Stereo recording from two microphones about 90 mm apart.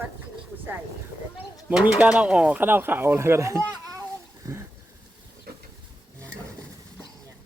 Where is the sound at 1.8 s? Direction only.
15° right (ahead or behind); by 3.6 s 30° right (ahead or behind).